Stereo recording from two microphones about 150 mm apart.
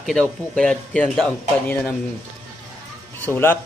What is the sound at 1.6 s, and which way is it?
Speech, 10° left (ahead or behind).